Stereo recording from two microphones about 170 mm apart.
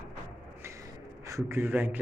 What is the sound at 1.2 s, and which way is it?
Speech, 15° right (ahead or behind).